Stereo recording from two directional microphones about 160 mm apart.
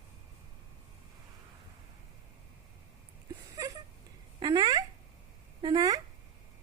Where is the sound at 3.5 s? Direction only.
20° right (ahead or behind).